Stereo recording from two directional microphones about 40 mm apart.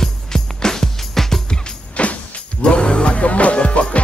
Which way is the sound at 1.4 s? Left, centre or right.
Left.